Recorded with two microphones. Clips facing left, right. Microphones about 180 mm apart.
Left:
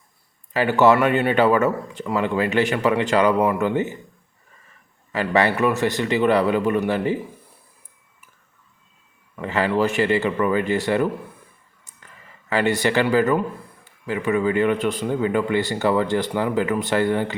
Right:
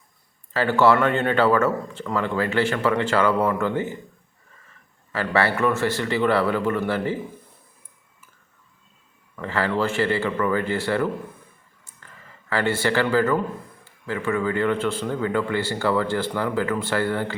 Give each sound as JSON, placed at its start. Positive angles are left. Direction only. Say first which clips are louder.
{"t": 0.5, "sound": "speech", "louder": "left 2 dB", "side_deg": 15}
{"t": 5.1, "sound": "speech", "louder": "left 2 dB", "side_deg": 20}
{"t": 9.3, "sound": "speech", "louder": "left 3 dB", "side_deg": 15}
{"t": 12.5, "sound": "speech", "louder": "left 2 dB", "side_deg": 20}